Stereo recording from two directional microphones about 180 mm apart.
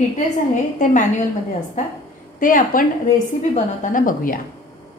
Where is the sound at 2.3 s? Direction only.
50° left (ahead or behind).